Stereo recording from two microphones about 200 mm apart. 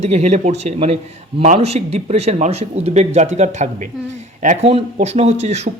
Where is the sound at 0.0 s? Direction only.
35° right (ahead or behind).